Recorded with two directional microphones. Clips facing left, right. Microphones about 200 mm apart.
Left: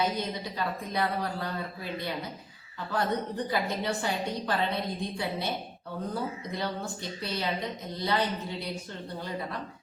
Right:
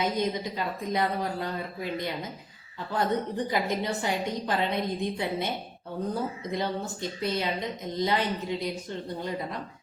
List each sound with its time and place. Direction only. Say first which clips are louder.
0.0 s a woman's voice: right 3 dB; 20° right (ahead or behind)
6.5 s a woman's voice: right 3 dB; 20° right (ahead or behind)